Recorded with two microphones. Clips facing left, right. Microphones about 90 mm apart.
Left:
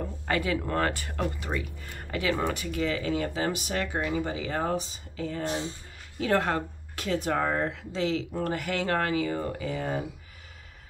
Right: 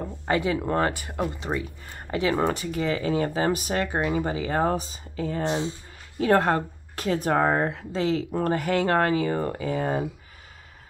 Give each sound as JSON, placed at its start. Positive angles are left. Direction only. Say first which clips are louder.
{"t": 0.3, "sound": "speech", "louder": "right 4 dB", "side_deg": -25}